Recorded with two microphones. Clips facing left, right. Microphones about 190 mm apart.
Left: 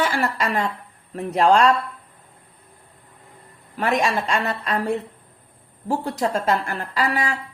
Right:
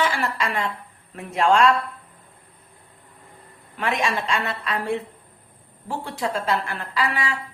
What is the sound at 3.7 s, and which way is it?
A woman's voice, 40° left (ahead or behind).